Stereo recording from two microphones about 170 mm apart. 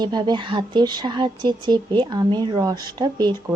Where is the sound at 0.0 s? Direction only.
25° right (ahead or behind).